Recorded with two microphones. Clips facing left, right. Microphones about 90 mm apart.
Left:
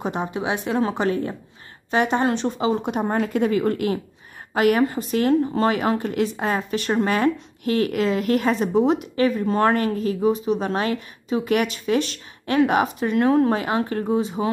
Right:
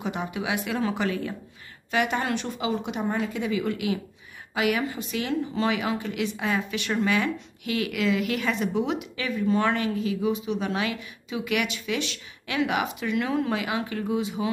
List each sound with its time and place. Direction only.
0.0 s speech: 35° left (ahead or behind)